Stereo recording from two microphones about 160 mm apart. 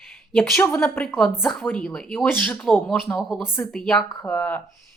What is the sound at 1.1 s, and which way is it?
A woman's voice, 5° left (ahead or behind).